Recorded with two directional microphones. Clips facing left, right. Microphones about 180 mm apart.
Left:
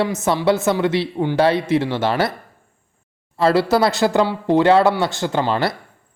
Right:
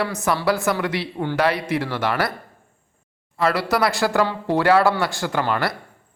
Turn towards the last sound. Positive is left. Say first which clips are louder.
# left 3 dB
turn(degrees=25)  # may be behind; listen again after turning